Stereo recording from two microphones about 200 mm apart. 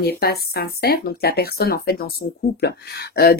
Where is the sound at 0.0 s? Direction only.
50° left (ahead or behind).